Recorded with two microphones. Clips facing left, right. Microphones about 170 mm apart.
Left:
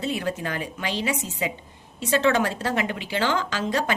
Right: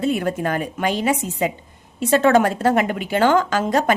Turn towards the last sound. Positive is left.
turn(degrees=-50)  # may be behind; listen again after turning